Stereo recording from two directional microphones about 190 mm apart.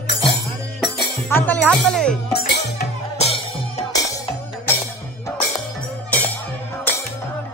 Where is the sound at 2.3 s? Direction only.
60° left (ahead or behind).